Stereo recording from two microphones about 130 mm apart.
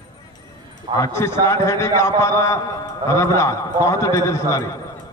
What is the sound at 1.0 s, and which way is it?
A man's voice, 20° left (ahead or behind).